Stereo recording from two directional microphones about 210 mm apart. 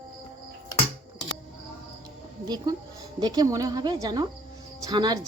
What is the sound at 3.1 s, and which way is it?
Speech, 20° right (ahead or behind).